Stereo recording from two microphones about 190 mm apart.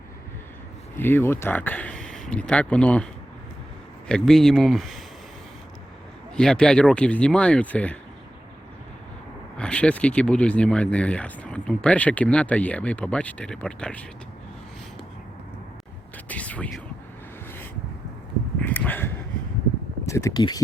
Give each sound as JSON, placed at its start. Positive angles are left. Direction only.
{"t": 0.9, "sound": "speech", "side_deg": 10}
{"t": 4.1, "sound": "speech", "side_deg": 0}
{"t": 6.3, "sound": "speech", "side_deg": 5}
{"t": 9.6, "sound": "speech", "side_deg": 5}
{"t": 16.1, "sound": "a sound", "side_deg": 10}
{"t": 18.6, "sound": "a sound", "side_deg": 10}
{"t": 20.1, "sound": "speech", "side_deg": 15}